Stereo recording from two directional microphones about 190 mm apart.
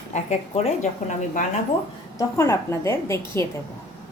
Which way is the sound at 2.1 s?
15° left (ahead or behind).